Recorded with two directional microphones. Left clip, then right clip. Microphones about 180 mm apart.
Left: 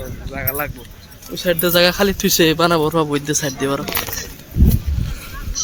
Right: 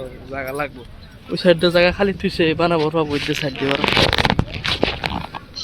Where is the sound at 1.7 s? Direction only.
15° left (ahead or behind).